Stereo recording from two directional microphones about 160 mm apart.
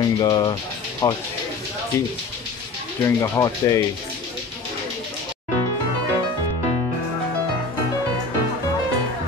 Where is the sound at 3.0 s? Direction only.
20° left (ahead or behind).